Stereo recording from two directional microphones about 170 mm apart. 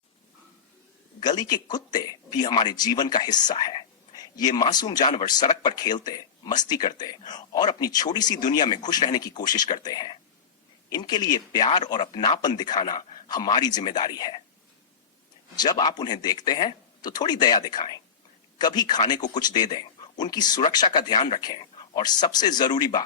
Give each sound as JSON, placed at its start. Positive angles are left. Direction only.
{"t": 1.2, "sound": "speech", "side_deg": 25}
{"t": 15.5, "sound": "speech", "side_deg": 25}
{"t": 21.2, "sound": "speech", "side_deg": 35}
{"t": 21.4, "sound": "speech", "side_deg": 25}